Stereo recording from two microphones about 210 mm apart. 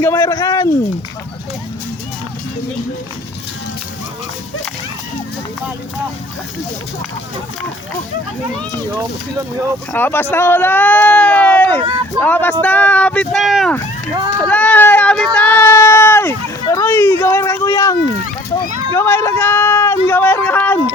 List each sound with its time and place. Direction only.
0.0 s a sound: 10° left (ahead or behind)
9.9 s speech: 10° left (ahead or behind)
11.8 s speech: 25° right (ahead or behind)
12.2 s speech: 10° left (ahead or behind)
14.3 s a sound: 5° left (ahead or behind)
18.9 s speech: 10° left (ahead or behind)